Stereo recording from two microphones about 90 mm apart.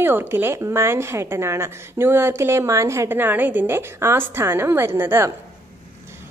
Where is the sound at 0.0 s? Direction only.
25° right (ahead or behind).